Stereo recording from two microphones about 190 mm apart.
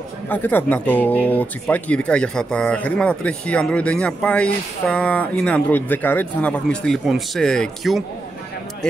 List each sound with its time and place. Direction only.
0.3 s speech: 10° left (ahead or behind)